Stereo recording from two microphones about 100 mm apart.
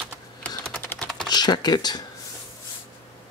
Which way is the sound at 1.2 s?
45° left (ahead or behind).